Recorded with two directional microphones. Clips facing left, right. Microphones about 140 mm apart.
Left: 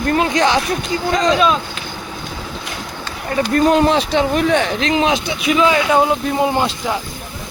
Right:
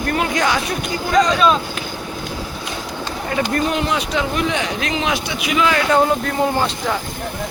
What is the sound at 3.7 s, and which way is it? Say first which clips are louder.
Speech: left 6 dB; 30° left (ahead or behind).